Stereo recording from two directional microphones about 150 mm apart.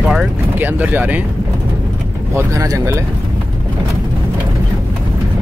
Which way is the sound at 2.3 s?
20° right (ahead or behind).